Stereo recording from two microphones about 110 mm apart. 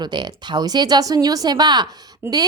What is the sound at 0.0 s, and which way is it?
Speech, 40° right (ahead or behind).